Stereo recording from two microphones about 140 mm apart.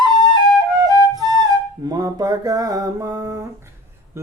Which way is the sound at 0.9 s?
30° right (ahead or behind).